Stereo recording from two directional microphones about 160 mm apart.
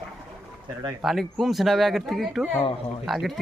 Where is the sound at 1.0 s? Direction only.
Centre (ahead or behind).